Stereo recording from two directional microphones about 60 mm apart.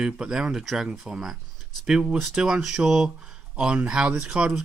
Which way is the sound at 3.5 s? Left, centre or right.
Centre.